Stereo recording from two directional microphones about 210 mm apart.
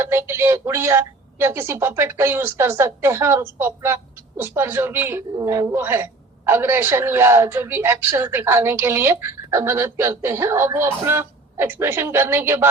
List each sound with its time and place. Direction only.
0.0 s a woman's voice: 10° right (ahead or behind)